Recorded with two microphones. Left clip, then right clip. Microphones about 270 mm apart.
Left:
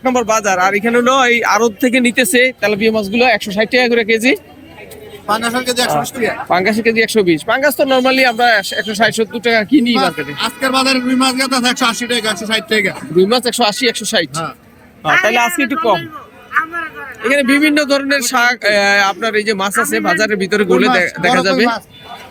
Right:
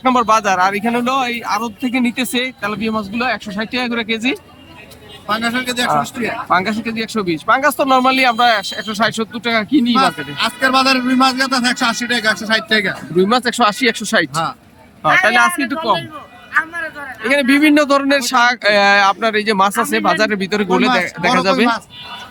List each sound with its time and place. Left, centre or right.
0.0 s speech: centre
16.5 s a sound: centre
17.3 s speech: centre